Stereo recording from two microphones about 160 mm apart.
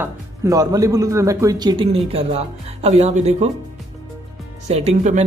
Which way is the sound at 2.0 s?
35° right (ahead or behind).